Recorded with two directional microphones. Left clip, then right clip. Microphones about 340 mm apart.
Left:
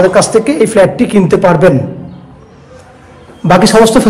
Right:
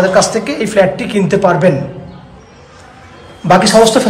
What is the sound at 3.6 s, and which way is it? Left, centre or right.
Speech, centre.